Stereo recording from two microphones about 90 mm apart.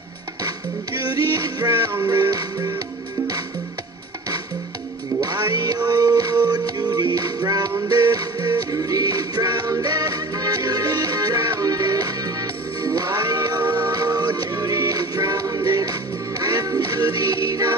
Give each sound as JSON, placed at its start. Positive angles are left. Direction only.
{"t": 1.0, "sound": "music", "side_deg": -45}
{"t": 5.2, "sound": "music", "side_deg": -45}